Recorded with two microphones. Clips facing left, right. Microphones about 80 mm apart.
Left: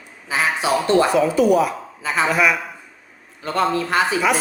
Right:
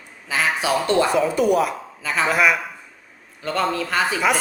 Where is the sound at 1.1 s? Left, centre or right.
Centre.